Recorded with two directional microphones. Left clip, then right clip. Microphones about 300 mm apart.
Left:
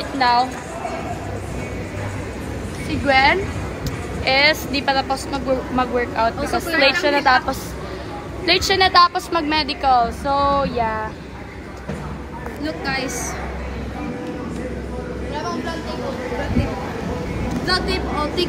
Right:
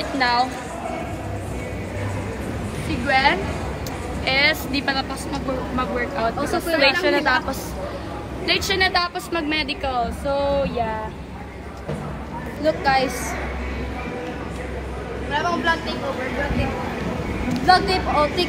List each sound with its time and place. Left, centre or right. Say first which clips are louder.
0.2 s a woman's voice: left 3 dB; centre
3.1 s a woman's voice: left 3 dB; centre
12.6 s speech: right 6 dB; centre
15.3 s a sound: right 6 dB; right
17.6 s speech: right 5 dB; centre